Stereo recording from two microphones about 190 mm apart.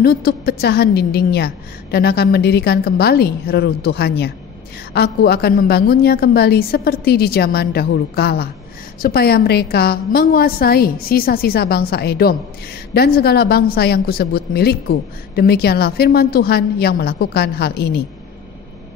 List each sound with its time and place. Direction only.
0.0 s a woman's voice: 50° left (ahead or behind)